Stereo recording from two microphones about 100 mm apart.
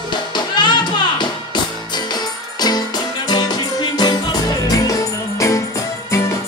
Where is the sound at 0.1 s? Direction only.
50° left (ahead or behind).